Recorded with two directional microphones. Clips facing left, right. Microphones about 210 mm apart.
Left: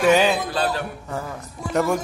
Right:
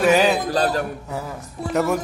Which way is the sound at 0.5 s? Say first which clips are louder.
Right 3 dB; 40° right (ahead or behind).